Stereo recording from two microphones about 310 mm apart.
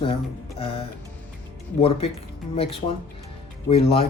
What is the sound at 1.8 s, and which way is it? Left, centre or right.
Speech, centre.